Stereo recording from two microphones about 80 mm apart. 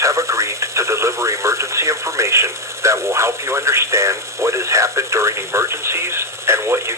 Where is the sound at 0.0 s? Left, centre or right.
Right.